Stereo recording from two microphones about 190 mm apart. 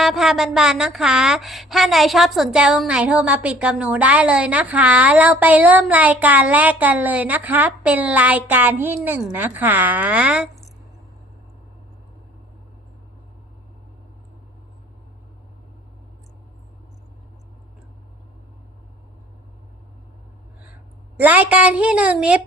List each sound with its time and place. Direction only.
0.0 s a woman's voice: centre (ahead or behind)
21.2 s a woman's voice: 10° right (ahead or behind)